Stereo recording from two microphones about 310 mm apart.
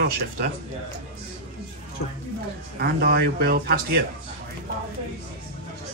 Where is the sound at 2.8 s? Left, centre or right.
Right.